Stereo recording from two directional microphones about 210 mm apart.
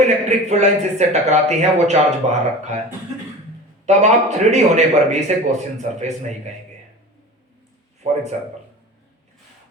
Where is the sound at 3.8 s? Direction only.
35° right (ahead or behind).